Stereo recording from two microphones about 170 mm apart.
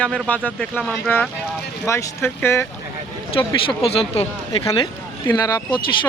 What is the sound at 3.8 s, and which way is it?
Speech, 35° left (ahead or behind).